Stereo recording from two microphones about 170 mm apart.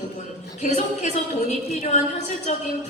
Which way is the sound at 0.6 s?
45° left (ahead or behind).